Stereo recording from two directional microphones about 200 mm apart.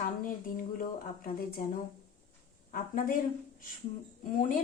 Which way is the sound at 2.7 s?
45° left (ahead or behind).